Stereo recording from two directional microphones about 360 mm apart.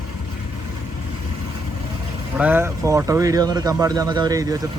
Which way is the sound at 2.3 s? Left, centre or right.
Centre.